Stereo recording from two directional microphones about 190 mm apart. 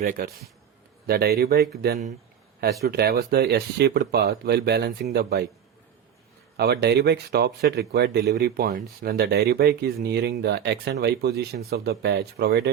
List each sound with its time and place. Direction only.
0.0 s a man's voice: 45° right (ahead or behind)
6.6 s speech: 60° right (ahead or behind)